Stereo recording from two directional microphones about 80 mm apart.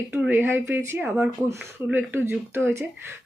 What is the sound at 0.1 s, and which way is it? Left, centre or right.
Speech, right.